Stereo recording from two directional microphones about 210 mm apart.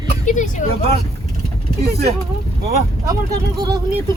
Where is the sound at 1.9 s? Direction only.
45° right (ahead or behind).